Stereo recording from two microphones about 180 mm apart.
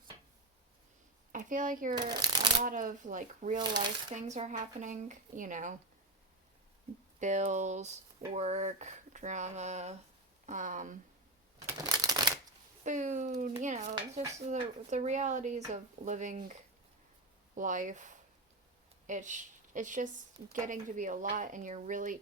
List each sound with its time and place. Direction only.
1.3 s speech: 45° right (ahead or behind)
2.0 s speech: 25° right (ahead or behind)
2.6 s speech: 45° right (ahead or behind)
3.6 s speech: 25° right (ahead or behind)
4.1 s speech: 40° right (ahead or behind)
7.2 s speech: 40° right (ahead or behind)
11.8 s shuffling cards: 20° right (ahead or behind)
12.8 s speech: 45° right (ahead or behind)
13.9 s speech: 20° right (ahead or behind)
14.5 s speech: 40° right (ahead or behind)
17.6 s speech: 45° right (ahead or behind)